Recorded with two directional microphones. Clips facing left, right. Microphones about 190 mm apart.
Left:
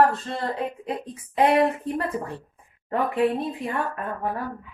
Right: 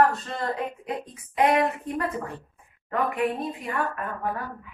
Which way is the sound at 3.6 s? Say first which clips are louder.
Left 1 dB; 25° left (ahead or behind).